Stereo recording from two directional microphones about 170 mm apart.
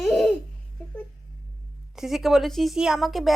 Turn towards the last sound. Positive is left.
turn(degrees=0)  # may be behind; listen again after turning